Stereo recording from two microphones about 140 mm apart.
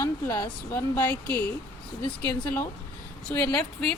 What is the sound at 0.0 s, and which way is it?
Speech, 20° left (ahead or behind).